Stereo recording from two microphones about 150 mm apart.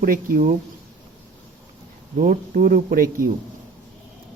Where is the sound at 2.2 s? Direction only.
70° right (ahead or behind).